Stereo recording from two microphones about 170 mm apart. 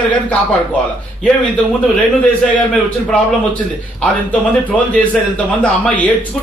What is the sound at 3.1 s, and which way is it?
A man's voice, 10° left (ahead or behind).